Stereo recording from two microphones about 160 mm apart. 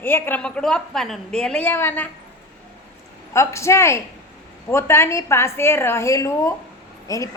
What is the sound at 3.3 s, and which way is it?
A woman's voice, 20° left (ahead or behind).